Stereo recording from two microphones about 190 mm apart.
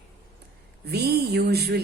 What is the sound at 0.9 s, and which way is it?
Speech, 60° right (ahead or behind).